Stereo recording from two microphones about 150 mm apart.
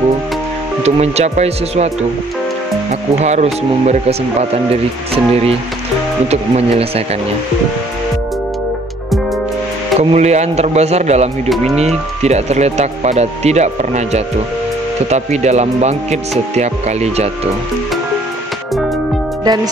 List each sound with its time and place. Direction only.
0.8 s speech: 45° right (ahead or behind)
2.9 s speech: 50° right (ahead or behind)
9.9 s speech: 50° right (ahead or behind)
11.4 s speech: centre (ahead or behind)
11.8 s speech: 45° right (ahead or behind)
19.4 s speech: 25° right (ahead or behind)